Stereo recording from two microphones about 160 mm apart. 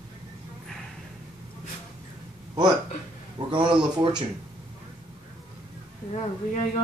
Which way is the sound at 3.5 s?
30° right (ahead or behind).